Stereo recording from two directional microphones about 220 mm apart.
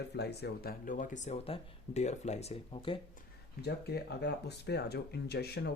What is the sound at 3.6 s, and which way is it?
Speech, 50° left (ahead or behind).